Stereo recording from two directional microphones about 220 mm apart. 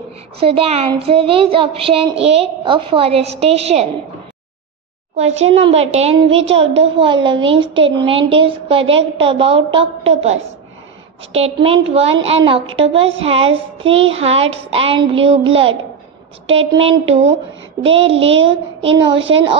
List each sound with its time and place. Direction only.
0.4 s a woman's voice: 25° right (ahead or behind)
5.1 s a woman's voice: 30° right (ahead or behind)
6.6 s a woman's voice: 60° right (ahead or behind)
7.0 s a woman's voice: 20° right (ahead or behind)